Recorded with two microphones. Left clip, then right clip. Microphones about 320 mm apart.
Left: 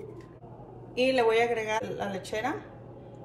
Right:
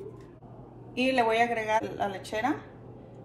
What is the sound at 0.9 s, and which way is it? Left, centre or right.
A woman's voice, centre.